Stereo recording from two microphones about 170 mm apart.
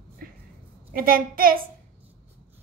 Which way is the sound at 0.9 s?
60° right (ahead or behind).